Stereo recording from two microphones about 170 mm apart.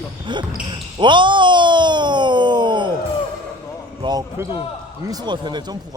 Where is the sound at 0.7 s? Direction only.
30° right (ahead or behind).